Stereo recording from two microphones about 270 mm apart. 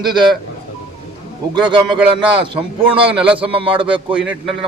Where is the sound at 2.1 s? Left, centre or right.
Centre.